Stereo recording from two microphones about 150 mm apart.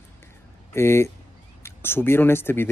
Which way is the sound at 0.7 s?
15° left (ahead or behind).